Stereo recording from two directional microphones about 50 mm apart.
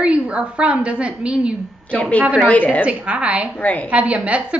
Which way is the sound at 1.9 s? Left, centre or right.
Left.